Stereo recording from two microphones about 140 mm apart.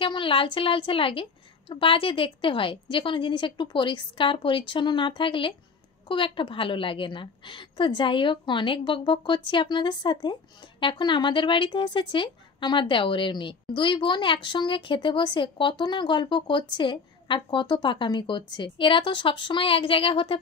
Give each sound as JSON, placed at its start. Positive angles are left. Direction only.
{"t": 0.0, "sound": "speech", "side_deg": 35}